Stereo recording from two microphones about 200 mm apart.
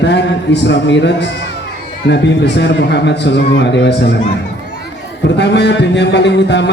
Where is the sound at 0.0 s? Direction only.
60° left (ahead or behind).